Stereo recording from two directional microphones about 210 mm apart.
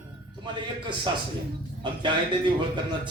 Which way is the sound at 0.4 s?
20° right (ahead or behind).